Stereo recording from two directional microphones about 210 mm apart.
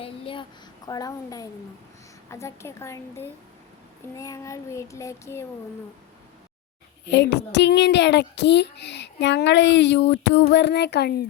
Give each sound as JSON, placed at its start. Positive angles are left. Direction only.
{"t": 0.0, "sound": "a sound", "side_deg": 25}
{"t": 0.9, "sound": "child singing", "side_deg": 15}
{"t": 7.1, "sound": "a child's voice", "side_deg": 55}